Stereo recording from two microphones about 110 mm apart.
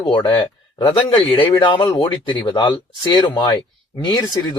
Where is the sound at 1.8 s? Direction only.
30° left (ahead or behind).